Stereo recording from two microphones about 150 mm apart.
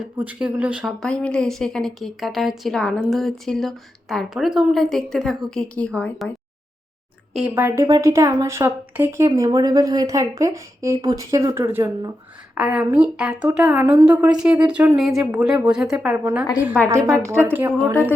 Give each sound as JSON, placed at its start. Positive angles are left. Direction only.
{"t": 0.0, "sound": "speech", "side_deg": -10}
{"t": 7.3, "sound": "speech", "side_deg": -10}
{"t": 12.5, "sound": "speech", "side_deg": -5}
{"t": 16.9, "sound": "speech", "side_deg": -20}